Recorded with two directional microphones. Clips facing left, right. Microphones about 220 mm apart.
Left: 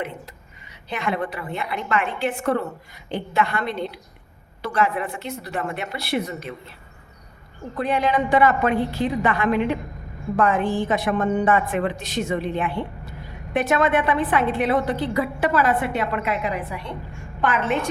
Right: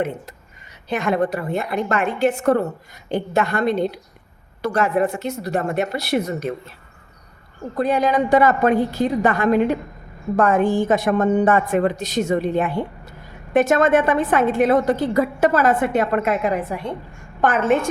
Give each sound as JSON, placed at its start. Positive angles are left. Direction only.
{"t": 0.0, "sound": "a woman's voice", "side_deg": -45}
{"t": 7.8, "sound": "a woman's voice", "side_deg": -40}